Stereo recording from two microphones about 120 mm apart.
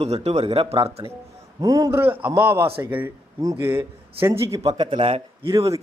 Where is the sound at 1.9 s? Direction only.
15° right (ahead or behind).